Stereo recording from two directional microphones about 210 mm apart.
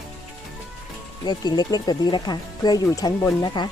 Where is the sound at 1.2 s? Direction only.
20° left (ahead or behind).